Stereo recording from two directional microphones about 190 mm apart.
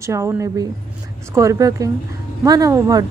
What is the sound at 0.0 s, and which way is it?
A woman's voice, 15° right (ahead or behind).